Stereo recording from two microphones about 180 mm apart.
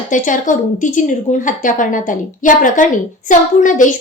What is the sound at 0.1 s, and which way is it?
A woman's voice, 45° left (ahead or behind).